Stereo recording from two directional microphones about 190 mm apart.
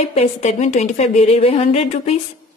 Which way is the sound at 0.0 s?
35° left (ahead or behind).